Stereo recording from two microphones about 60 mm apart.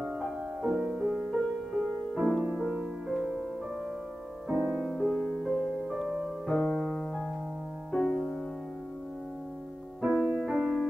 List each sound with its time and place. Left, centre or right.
0.0 s music: centre
4.9 s music: centre
7.9 s music: centre
10.0 s music: centre
10.3 s music: centre